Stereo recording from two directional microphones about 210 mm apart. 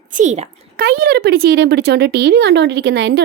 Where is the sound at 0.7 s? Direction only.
45° right (ahead or behind).